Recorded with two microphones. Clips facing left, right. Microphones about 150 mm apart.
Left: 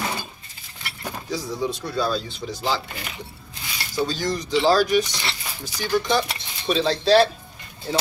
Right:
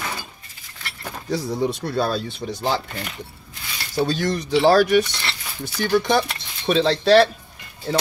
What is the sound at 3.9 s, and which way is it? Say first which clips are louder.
Speech: right 3 dB; 60° right (ahead or behind).